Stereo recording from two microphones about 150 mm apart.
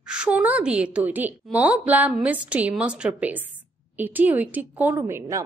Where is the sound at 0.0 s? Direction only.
5° right (ahead or behind).